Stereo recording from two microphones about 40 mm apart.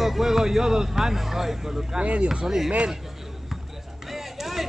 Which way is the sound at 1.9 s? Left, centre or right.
Right.